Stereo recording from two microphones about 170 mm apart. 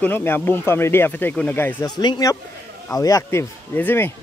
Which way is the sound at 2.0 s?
25° left (ahead or behind).